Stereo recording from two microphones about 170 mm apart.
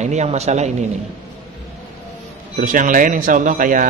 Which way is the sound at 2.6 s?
50° right (ahead or behind).